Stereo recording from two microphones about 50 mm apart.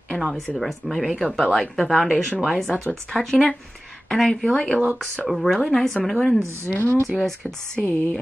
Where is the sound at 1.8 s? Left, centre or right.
Centre.